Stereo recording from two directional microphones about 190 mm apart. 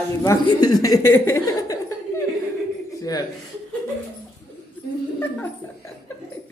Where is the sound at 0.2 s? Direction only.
20° left (ahead or behind).